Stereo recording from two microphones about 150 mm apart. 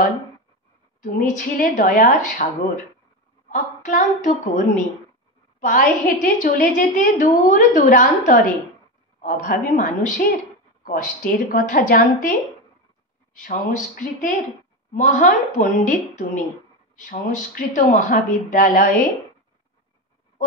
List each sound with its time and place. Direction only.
1.0 s a woman's voice: 60° left (ahead or behind)
3.4 s a woman's voice: 55° left (ahead or behind)